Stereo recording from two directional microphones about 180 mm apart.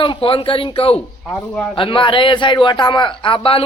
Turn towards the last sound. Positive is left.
turn(degrees=30)  # may be behind; listen again after turning